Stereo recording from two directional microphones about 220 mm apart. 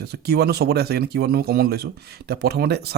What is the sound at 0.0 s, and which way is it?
Speech, 45° right (ahead or behind).